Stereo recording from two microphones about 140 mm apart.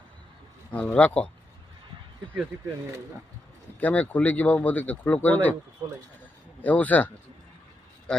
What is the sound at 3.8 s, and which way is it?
Speech, 10° left (ahead or behind).